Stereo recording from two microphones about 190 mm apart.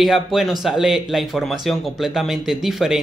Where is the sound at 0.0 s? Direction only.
Centre (ahead or behind).